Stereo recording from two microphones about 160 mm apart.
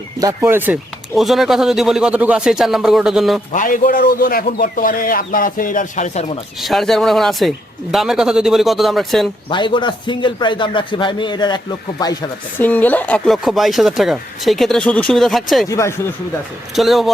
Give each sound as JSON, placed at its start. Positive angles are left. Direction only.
{"t": 0.4, "sound": "speech", "side_deg": -10}
{"t": 1.1, "sound": "speech", "side_deg": 0}
{"t": 3.5, "sound": "a man's voice", "side_deg": 55}
{"t": 6.6, "sound": "speech", "side_deg": 0}
{"t": 9.5, "sound": "a man's voice", "side_deg": 30}
{"t": 12.5, "sound": "speech", "side_deg": 10}
{"t": 15.7, "sound": "speech", "side_deg": 20}
{"t": 16.7, "sound": "speech", "side_deg": 0}